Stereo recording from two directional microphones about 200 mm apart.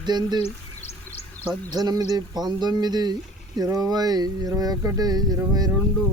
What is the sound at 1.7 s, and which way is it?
Speech, 20° right (ahead or behind).